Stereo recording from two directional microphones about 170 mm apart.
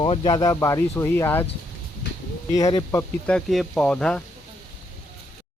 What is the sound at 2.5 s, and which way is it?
Speech, 20° left (ahead or behind).